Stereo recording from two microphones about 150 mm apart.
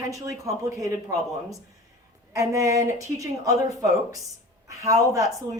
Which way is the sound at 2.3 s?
20° right (ahead or behind).